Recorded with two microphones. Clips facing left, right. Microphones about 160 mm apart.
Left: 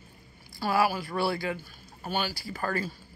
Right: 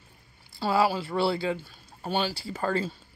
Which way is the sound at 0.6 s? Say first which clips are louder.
Right 2 dB; 25° right (ahead or behind).